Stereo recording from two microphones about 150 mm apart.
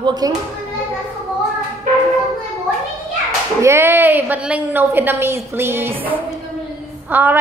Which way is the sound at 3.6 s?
15° right (ahead or behind).